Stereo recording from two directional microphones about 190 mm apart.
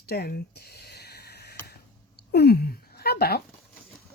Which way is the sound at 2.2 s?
60° left (ahead or behind).